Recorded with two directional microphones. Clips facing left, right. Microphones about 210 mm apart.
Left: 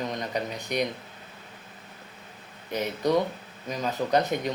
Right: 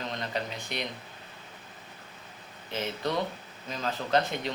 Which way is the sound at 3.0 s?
15° left (ahead or behind).